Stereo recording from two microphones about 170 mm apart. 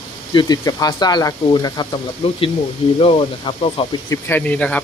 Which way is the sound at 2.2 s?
35° left (ahead or behind).